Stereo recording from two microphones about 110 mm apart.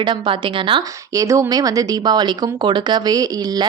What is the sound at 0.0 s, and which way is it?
Speech, 50° right (ahead or behind).